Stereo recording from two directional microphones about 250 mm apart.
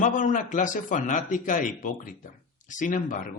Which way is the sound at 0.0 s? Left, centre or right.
Left.